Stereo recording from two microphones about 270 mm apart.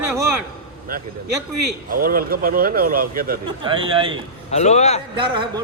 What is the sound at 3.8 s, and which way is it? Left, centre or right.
Speech, centre.